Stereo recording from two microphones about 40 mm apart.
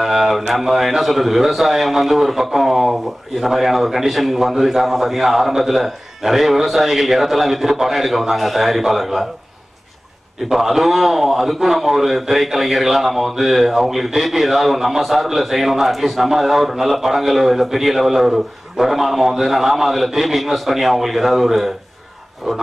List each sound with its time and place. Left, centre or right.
0.0 s a man's voice: centre
10.5 s a man's voice: centre